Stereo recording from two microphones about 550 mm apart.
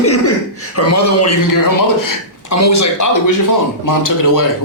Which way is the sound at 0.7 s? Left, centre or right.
Left.